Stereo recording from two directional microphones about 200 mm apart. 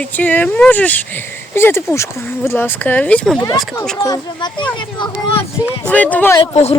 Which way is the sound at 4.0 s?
20° left (ahead or behind).